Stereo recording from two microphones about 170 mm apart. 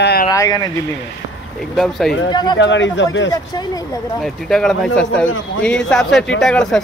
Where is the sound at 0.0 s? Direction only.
65° left (ahead or behind).